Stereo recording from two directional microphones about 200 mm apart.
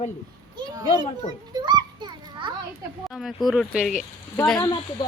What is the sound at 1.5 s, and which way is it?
Children playing, 20° right (ahead or behind).